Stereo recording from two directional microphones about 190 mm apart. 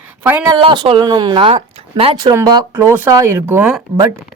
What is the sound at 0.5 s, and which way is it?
A woman's voice, 25° right (ahead or behind).